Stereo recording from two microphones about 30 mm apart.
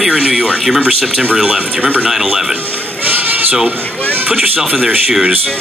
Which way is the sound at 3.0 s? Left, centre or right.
Right.